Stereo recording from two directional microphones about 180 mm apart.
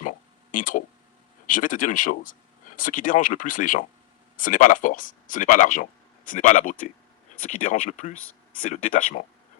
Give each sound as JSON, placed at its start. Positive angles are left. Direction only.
{"t": 0.0, "sound": "a sound", "side_deg": 45}
{"t": 1.5, "sound": "speech", "side_deg": 45}
{"t": 8.1, "sound": "speech", "side_deg": 10}
{"t": 8.7, "sound": "speech", "side_deg": 45}